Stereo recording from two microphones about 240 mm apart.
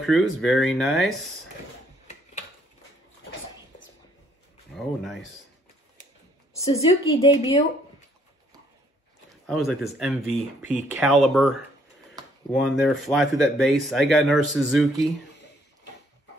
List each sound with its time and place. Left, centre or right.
0.0 s speech: centre
4.7 s speech: centre
6.6 s a woman's voice: left
9.5 s speech: centre